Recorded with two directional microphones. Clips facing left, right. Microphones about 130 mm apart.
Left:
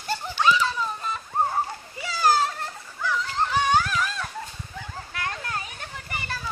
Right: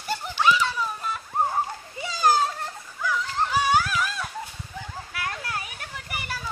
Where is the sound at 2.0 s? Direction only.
20° right (ahead or behind).